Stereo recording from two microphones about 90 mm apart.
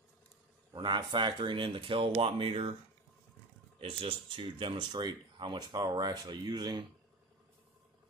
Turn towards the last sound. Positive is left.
turn(degrees=-50)  # may be behind; listen again after turning